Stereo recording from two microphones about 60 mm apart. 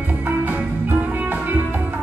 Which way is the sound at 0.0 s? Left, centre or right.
Right.